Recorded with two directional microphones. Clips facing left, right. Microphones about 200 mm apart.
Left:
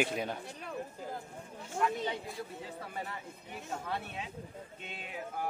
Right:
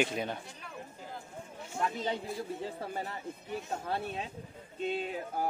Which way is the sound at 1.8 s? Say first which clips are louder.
Left 1 dB; 35° right (ahead or behind).